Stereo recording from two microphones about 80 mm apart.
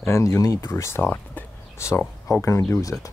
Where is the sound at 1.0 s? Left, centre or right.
Left.